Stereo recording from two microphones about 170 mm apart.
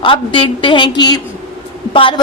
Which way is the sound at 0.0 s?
30° left (ahead or behind).